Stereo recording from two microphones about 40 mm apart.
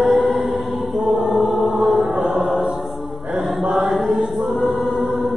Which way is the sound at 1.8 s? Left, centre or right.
Centre.